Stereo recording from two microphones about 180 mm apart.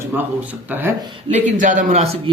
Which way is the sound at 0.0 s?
10° right (ahead or behind).